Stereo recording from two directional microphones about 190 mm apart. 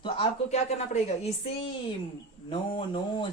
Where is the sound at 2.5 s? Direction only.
25° left (ahead or behind).